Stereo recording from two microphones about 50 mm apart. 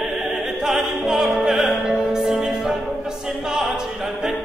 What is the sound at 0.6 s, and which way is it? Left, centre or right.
Music, centre.